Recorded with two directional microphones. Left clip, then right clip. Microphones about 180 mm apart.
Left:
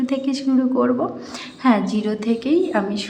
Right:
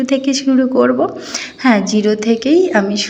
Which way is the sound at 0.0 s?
15° right (ahead or behind).